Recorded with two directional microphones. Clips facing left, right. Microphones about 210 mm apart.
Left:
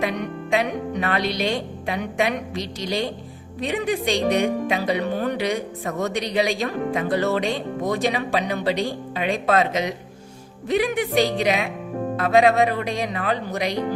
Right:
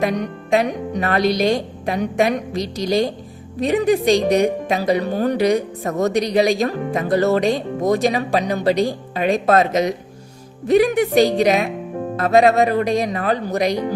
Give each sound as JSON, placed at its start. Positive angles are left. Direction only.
{"t": 0.0, "sound": "a woman's voice", "side_deg": -40}